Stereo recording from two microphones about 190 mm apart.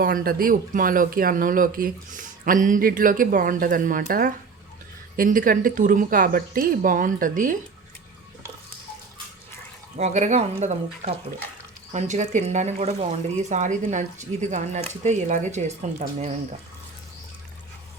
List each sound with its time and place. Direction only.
0.0 s speech: 50° right (ahead or behind)
10.0 s speech: 40° right (ahead or behind)